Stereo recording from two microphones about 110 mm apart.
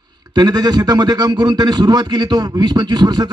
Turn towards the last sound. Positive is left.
turn(degrees=-40)  # may be behind; listen again after turning